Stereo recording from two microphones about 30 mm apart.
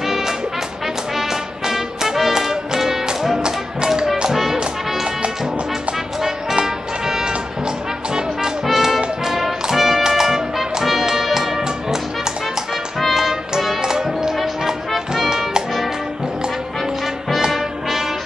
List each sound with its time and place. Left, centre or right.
0.0 s music: centre
4.3 s music: centre
6.6 s music: centre
8.6 s music: centre
13.1 s music: centre
13.8 s music: centre
17.5 s music: centre